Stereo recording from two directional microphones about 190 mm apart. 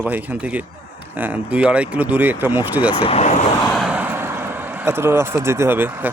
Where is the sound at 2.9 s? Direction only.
30° left (ahead or behind).